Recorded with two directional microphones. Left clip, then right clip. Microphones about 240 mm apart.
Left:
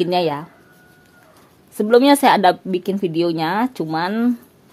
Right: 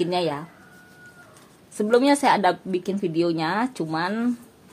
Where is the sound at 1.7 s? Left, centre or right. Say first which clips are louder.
Left 6 dB; left.